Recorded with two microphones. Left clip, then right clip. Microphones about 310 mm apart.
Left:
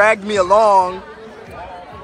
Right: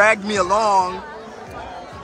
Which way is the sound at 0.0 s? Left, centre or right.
Centre.